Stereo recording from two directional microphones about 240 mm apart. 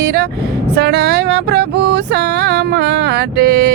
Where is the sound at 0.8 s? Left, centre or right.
Right.